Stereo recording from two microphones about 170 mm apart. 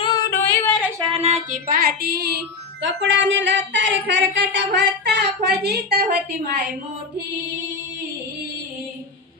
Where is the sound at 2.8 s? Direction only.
90° right; by 6.1 s 70° right (ahead or behind).